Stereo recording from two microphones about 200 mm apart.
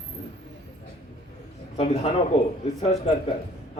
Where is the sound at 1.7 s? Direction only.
30° left (ahead or behind).